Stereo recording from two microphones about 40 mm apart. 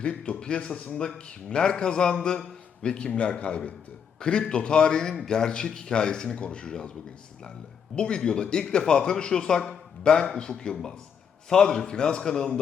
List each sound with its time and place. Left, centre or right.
0.0 s a man's voice: left
7.9 s a man's voice: left